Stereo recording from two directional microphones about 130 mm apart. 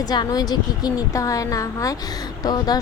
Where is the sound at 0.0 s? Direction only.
30° left (ahead or behind).